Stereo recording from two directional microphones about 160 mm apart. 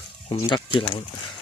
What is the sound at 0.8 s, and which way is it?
Speech, 30° left (ahead or behind).